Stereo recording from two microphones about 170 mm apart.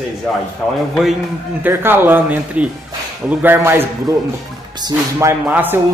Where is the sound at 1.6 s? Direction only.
10° right (ahead or behind).